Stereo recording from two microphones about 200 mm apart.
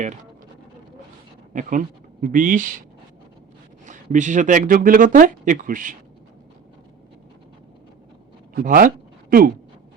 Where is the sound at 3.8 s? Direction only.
40° right (ahead or behind).